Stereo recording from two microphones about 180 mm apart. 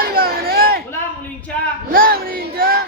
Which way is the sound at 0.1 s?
55° right (ahead or behind).